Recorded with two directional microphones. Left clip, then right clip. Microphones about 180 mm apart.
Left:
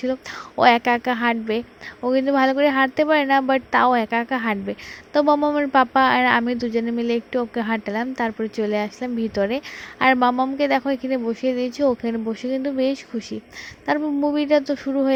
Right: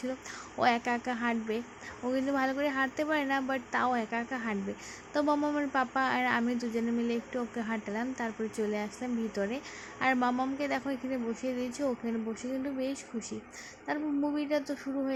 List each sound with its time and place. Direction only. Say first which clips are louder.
0.0 s speech: left 12 dB; 30° left (ahead or behind)